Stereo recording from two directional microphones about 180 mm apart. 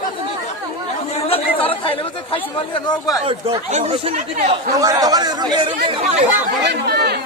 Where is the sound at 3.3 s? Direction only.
30° right (ahead or behind).